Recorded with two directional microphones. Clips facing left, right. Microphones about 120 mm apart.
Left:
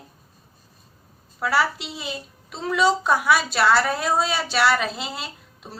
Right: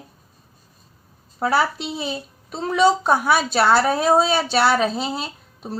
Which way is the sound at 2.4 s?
40° right (ahead or behind).